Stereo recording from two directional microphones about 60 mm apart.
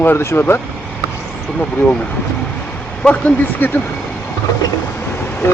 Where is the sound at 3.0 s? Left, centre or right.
Left.